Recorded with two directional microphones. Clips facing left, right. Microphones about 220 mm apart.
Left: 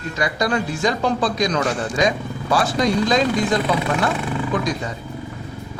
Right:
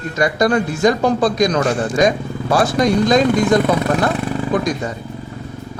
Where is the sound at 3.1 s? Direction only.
45° right (ahead or behind).